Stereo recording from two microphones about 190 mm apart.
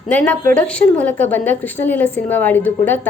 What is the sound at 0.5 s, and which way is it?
A woman's voice, 5° left (ahead or behind).